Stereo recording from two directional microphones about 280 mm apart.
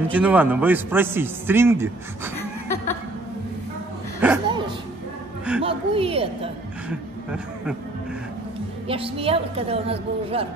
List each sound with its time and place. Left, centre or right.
0.1 s a man's voice: centre
2.3 s chuckle: centre
4.2 s speech: centre
5.6 s a sound: centre
6.9 s a sound: centre
8.8 s a woman's voice: centre